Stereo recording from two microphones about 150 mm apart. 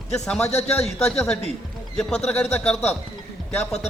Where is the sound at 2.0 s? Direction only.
5° left (ahead or behind).